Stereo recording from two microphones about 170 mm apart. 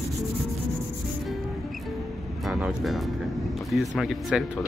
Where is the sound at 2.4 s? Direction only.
Centre (ahead or behind).